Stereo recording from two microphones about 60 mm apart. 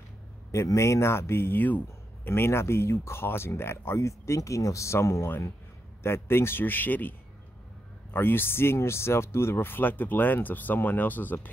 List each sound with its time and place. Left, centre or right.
0.7 s speech: left